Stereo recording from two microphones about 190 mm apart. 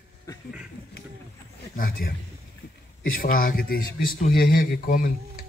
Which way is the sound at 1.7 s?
50° left (ahead or behind).